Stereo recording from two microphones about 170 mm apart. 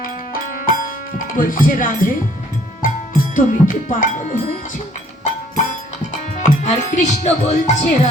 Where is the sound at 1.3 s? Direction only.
55° left (ahead or behind).